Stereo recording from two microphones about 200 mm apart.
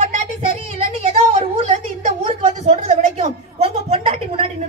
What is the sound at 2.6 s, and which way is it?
A woman's voice, 35° right (ahead or behind).